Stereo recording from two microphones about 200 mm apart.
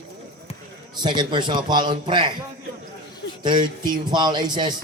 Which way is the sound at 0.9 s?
20° right (ahead or behind).